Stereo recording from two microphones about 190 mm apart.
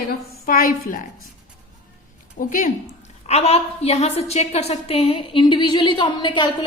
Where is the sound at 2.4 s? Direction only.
45° left (ahead or behind).